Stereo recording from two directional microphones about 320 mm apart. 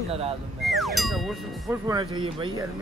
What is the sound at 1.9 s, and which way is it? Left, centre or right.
Speech, centre.